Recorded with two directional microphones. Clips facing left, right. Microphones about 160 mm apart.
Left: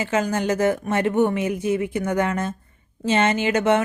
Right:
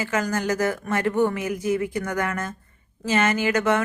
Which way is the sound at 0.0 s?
25° left (ahead or behind).